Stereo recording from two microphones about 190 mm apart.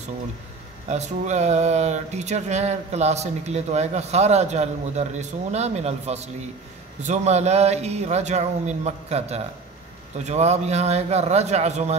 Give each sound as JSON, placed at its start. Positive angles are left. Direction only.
{"t": 0.8, "sound": "speech", "side_deg": -35}